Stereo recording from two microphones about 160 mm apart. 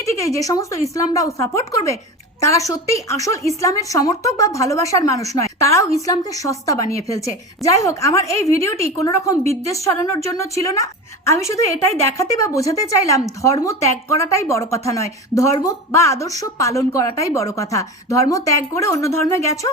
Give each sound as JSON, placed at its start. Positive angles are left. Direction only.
{"t": 0.0, "sound": "speech", "side_deg": 20}